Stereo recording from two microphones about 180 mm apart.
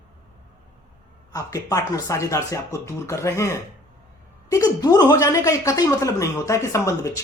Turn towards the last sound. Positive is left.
turn(degrees=20)  # may be behind; listen again after turning